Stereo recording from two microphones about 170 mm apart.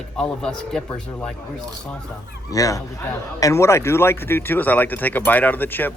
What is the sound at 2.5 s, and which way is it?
Speech, 20° left (ahead or behind).